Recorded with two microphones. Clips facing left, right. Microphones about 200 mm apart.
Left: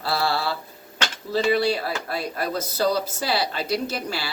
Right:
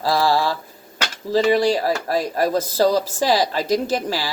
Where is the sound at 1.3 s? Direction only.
40° right (ahead or behind).